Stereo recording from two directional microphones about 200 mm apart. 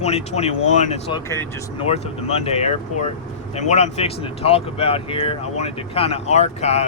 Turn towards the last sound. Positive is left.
turn(degrees=35)  # may be behind; listen again after turning